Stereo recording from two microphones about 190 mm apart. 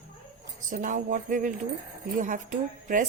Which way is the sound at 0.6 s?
40° right (ahead or behind).